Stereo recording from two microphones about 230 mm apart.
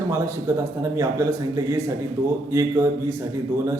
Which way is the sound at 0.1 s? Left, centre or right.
Centre.